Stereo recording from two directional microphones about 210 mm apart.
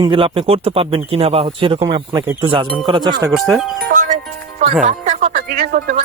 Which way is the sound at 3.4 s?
Centre (ahead or behind).